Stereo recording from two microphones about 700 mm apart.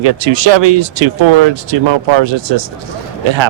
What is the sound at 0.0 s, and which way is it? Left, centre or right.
Speech, right.